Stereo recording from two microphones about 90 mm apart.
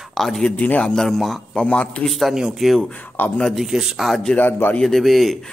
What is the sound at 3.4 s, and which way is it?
Speech, centre (ahead or behind).